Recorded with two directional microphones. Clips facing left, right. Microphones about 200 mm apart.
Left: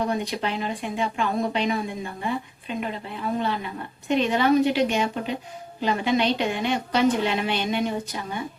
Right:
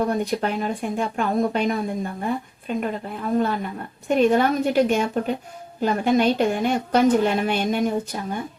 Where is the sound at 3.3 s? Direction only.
45° right (ahead or behind).